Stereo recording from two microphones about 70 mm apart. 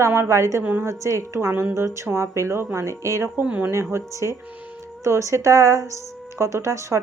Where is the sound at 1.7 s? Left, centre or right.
Right.